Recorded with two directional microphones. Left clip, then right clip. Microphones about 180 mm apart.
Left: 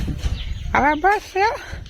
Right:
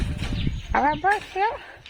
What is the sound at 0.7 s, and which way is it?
Speech, 40° left (ahead or behind).